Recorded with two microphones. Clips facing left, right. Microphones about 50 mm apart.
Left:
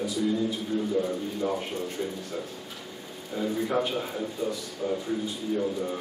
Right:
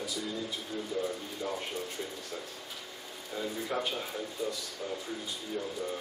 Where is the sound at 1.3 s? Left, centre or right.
Left.